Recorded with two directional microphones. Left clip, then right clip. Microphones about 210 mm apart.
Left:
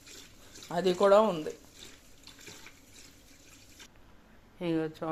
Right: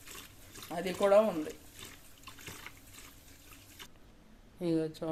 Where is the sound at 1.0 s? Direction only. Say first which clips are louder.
Left 2 dB; 25° left (ahead or behind).